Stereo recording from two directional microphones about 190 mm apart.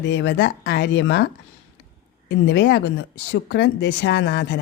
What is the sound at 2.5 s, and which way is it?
A woman's voice, 65° left (ahead or behind).